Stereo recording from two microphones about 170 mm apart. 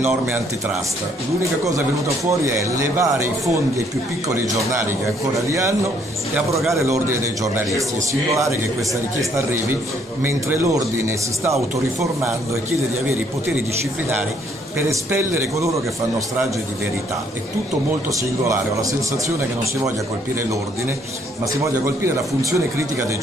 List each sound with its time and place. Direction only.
2.4 s a man's voice: 15° right (ahead or behind)
5.5 s a man's voice: 15° right (ahead or behind)
14.8 s a man's voice: 15° right (ahead or behind)
18.4 s a man's voice: 20° right (ahead or behind)
21.8 s a man's voice: 15° right (ahead or behind)